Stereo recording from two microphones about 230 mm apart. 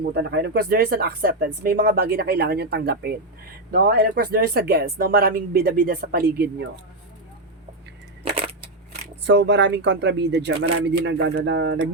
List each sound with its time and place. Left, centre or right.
0.0 s speech: right
9.2 s speech: right